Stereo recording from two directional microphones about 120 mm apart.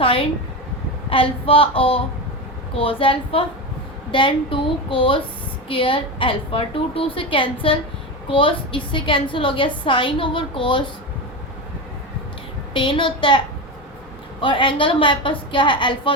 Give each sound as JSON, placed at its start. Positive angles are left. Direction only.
{"t": 0.0, "sound": "a sound", "side_deg": 50}
{"t": 1.1, "sound": "a woman's voice", "side_deg": 50}
{"t": 12.7, "sound": "a woman's voice", "side_deg": 45}
{"t": 14.4, "sound": "a woman's voice", "side_deg": 45}